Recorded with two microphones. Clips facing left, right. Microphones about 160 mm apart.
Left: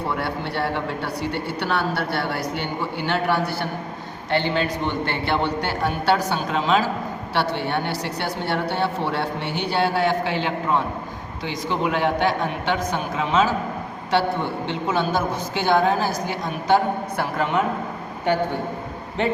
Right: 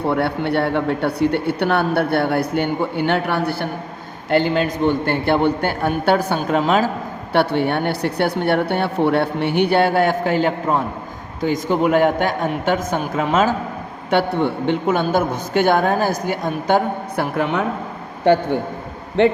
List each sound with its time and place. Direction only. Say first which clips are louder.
0.1 s a woman's voice: right 7 dB; 60° right (ahead or behind)